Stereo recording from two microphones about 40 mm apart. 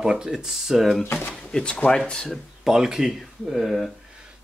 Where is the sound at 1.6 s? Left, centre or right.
Left.